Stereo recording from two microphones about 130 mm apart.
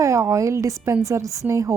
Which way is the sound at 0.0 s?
25° right (ahead or behind).